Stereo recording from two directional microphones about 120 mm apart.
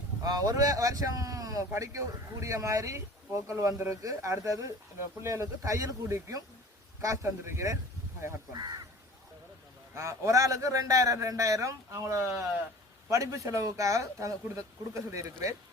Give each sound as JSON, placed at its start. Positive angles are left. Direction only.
{"t": 0.2, "sound": "speech", "side_deg": -30}
{"t": 9.9, "sound": "speech", "side_deg": -25}